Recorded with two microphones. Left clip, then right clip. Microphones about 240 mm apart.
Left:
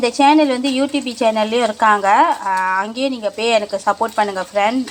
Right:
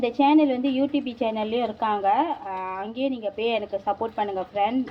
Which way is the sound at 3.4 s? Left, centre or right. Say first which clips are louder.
Left 10 dB; centre.